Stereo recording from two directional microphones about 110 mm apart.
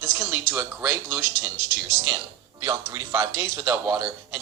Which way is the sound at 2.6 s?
30° right (ahead or behind).